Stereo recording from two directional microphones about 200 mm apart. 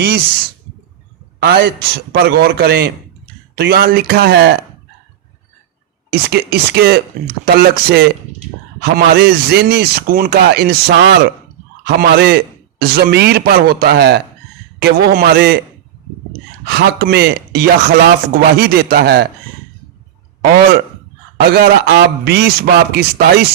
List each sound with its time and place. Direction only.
1.4 s a man's voice: 55° right (ahead or behind)
6.1 s a man's voice: 55° right (ahead or behind)
16.6 s speech: 55° right (ahead or behind)
20.4 s a man's voice: 50° right (ahead or behind)